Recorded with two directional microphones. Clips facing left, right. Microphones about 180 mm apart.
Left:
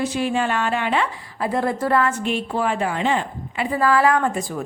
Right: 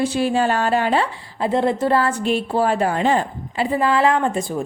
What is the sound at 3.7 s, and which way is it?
Speech, 25° right (ahead or behind).